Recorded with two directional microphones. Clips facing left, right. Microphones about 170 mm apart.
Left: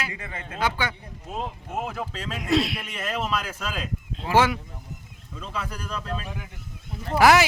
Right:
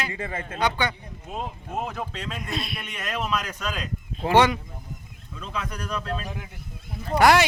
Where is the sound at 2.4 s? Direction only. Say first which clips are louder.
Left 13 dB; 90° left.